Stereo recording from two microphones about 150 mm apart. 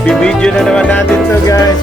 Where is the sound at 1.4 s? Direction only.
20° left (ahead or behind).